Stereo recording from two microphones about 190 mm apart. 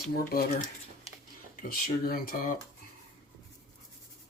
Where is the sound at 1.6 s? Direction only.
50° left (ahead or behind).